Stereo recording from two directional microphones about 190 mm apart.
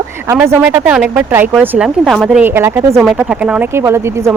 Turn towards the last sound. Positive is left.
turn(degrees=-15)  # may be behind; listen again after turning